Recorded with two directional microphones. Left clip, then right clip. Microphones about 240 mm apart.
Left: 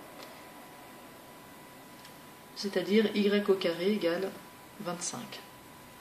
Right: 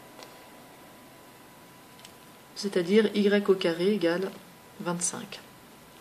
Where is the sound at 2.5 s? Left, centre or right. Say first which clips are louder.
Right 4 dB; right.